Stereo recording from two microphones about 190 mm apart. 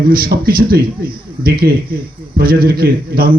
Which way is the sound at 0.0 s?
50° right (ahead or behind).